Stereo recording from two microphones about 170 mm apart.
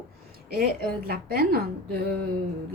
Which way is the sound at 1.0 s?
65° right (ahead or behind).